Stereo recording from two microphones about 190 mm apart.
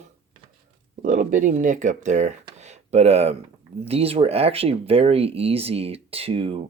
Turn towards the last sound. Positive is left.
turn(degrees=-30)  # may be behind; listen again after turning